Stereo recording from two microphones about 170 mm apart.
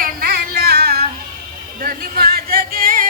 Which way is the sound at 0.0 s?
65° right (ahead or behind).